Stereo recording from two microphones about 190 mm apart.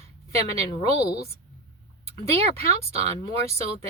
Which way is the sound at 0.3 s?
35° right (ahead or behind).